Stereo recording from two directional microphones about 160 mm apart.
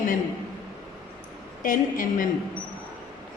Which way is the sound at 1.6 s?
55° left (ahead or behind).